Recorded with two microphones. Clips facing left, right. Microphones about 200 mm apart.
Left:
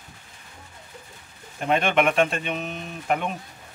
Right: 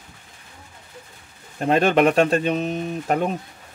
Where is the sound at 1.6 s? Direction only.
35° right (ahead or behind).